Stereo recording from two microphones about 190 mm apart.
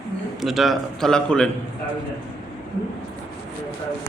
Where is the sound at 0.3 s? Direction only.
Centre (ahead or behind).